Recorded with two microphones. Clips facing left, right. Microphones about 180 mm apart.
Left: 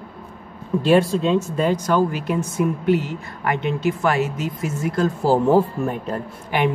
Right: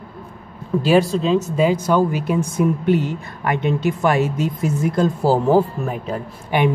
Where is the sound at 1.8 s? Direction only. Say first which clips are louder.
Right 2 dB; 15° right (ahead or behind).